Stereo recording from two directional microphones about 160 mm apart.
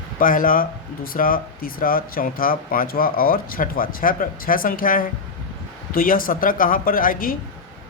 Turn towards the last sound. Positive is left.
turn(degrees=60)  # may be behind; listen again after turning